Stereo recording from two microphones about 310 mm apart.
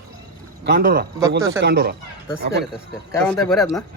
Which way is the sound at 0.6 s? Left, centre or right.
Right.